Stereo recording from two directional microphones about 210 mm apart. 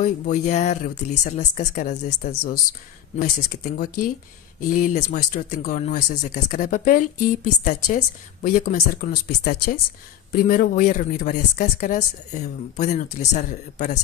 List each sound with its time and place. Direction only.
0.0 s speech: 35° left (ahead or behind)
1.6 s speech: 45° left (ahead or behind)